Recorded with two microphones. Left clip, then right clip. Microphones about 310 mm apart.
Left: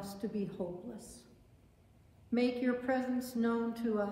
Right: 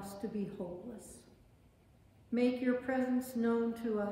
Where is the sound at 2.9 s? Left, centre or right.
Centre.